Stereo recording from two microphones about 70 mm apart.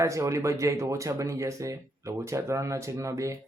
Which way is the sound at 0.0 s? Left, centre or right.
Right.